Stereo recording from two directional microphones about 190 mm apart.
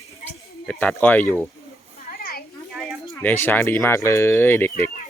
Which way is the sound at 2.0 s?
50° left (ahead or behind).